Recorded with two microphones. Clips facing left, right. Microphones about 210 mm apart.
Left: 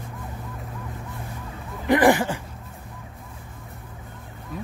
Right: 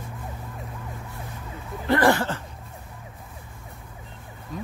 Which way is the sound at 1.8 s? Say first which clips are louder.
Left 3 dB; 15° left (ahead or behind).